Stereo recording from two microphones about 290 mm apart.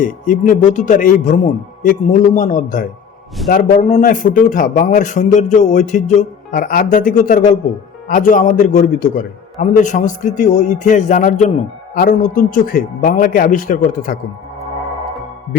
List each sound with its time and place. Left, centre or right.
0.0 s a man's voice: left